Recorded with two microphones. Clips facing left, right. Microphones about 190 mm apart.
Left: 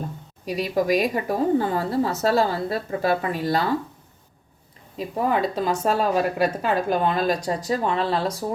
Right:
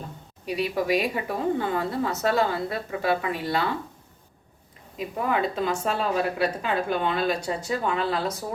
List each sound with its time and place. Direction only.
0.4 s speech: 40° left (ahead or behind)
4.9 s speech: 35° left (ahead or behind)